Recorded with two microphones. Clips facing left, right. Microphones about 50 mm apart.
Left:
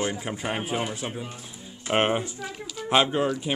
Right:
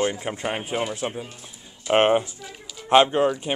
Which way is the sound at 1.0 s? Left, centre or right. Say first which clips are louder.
Right 3 dB; centre.